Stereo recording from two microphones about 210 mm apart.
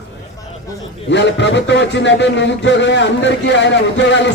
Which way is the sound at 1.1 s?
60° left (ahead or behind).